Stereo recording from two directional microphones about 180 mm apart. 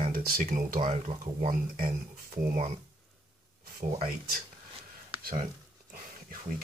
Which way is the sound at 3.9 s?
50° right (ahead or behind).